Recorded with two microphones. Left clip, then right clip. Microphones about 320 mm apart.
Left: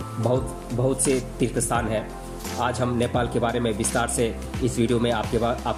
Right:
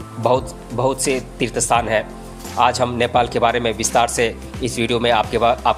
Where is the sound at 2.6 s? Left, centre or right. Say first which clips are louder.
Right 8 dB; centre.